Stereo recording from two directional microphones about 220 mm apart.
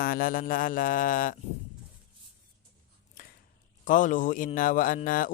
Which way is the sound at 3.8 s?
35° left (ahead or behind).